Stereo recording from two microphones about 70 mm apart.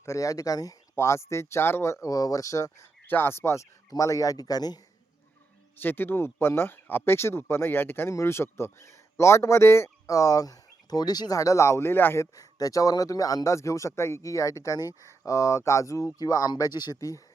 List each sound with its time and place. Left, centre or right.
0.0 s speech: left
0.9 s speech: left
2.0 s speech: left
3.1 s speech: left
5.8 s a man's voice: left
11.3 s speech: left
12.2 s speech: left
16.1 s speech: left